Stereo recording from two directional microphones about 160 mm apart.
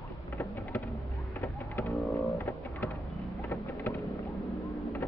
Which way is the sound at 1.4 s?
15° left (ahead or behind).